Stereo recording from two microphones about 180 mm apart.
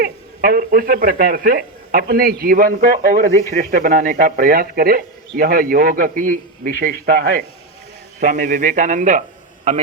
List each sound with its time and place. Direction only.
0.0 s a man's voice: 55° right (ahead or behind)